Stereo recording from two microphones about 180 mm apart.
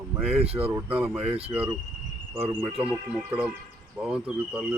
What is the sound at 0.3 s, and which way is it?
Speech, 35° right (ahead or behind).